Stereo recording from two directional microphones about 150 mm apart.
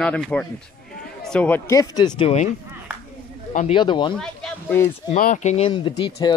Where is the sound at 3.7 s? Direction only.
30° left (ahead or behind).